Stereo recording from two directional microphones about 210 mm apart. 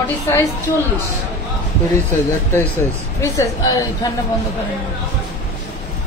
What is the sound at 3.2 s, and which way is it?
Speech, 15° left (ahead or behind).